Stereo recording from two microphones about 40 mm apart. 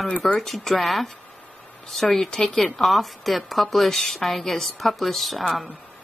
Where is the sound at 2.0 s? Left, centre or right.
Left.